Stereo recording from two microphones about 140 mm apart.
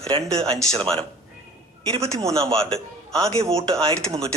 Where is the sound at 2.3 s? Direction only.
40° right (ahead or behind).